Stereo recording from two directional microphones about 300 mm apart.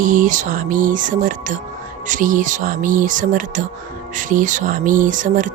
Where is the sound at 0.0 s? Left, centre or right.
Right.